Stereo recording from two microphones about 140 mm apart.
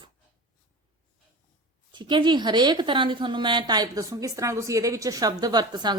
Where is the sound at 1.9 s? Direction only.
35° right (ahead or behind).